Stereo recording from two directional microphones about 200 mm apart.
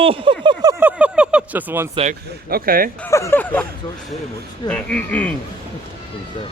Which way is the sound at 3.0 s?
15° left (ahead or behind).